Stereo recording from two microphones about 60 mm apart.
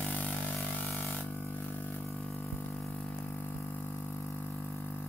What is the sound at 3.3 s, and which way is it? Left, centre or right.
Music, left.